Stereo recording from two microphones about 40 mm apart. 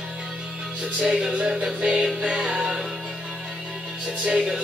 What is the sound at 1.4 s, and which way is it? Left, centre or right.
Music, right.